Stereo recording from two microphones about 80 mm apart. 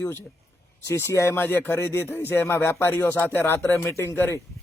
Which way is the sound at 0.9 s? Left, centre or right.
Left.